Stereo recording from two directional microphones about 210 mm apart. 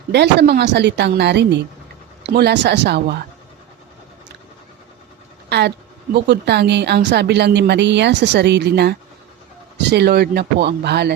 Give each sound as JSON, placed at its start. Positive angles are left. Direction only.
{"t": 0.1, "sound": "a woman's voice", "side_deg": -55}
{"t": 5.5, "sound": "a woman's voice", "side_deg": -55}